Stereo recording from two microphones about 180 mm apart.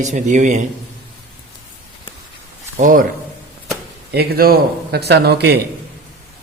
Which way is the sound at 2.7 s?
45° right (ahead or behind).